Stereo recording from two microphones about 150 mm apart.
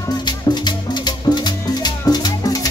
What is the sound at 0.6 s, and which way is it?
Music, 30° left (ahead or behind).